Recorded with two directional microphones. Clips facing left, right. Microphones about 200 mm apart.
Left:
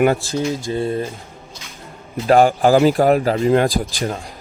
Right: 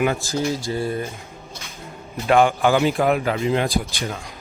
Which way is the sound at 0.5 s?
20° left (ahead or behind).